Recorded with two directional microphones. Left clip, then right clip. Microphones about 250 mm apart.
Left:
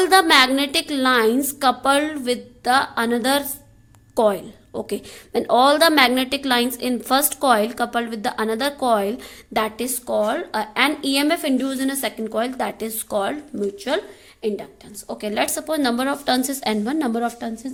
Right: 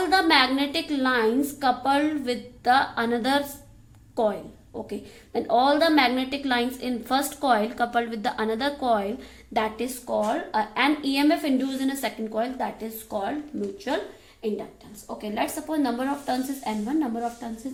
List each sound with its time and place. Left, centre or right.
0.0 s a woman's voice: left
15.0 s a woman's voice: left